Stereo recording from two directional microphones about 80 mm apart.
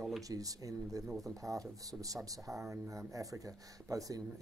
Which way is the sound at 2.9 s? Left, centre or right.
Right.